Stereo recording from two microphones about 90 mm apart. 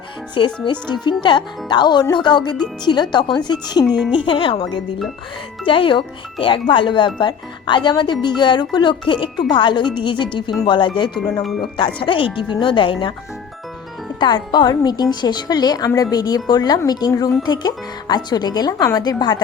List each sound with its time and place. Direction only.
0.3 s speech: 65° left (ahead or behind)
4.3 s speech: 75° left (ahead or behind)
14.2 s speech: 55° left (ahead or behind)